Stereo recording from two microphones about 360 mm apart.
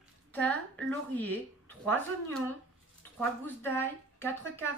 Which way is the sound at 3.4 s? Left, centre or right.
Centre.